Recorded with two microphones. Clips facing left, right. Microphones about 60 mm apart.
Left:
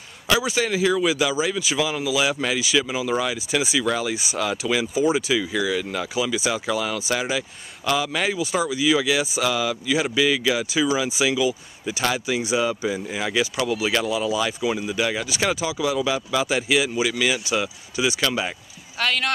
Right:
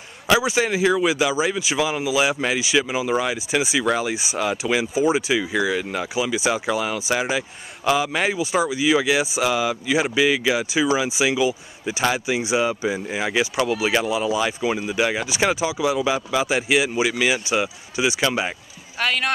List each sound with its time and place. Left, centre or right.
0.3 s speech: centre
18.9 s speech: centre